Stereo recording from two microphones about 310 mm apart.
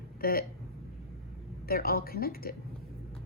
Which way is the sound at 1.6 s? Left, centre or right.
Left.